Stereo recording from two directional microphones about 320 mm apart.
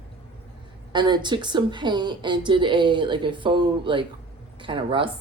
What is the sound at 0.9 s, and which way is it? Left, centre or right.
A woman's voice, centre.